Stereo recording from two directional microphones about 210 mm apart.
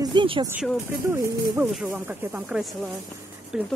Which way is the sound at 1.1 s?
10° right (ahead or behind).